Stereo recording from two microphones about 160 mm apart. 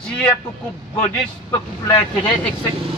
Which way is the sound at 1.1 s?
25° left (ahead or behind).